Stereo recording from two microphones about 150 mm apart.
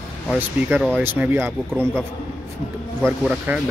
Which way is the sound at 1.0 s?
15° right (ahead or behind).